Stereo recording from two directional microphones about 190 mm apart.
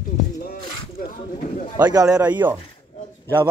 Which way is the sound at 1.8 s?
20° right (ahead or behind).